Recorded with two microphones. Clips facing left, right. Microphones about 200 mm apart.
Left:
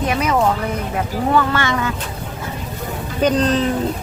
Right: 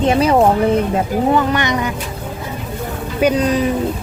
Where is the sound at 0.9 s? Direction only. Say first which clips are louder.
Right 3 dB; 20° right (ahead or behind).